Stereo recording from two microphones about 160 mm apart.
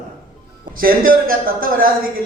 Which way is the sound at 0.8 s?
65° right (ahead or behind).